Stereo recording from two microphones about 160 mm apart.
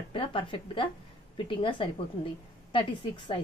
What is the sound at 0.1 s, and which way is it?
A woman's voice, 35° left (ahead or behind).